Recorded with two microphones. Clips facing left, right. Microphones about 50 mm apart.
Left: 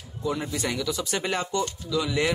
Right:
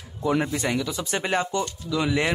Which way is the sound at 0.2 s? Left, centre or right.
Right.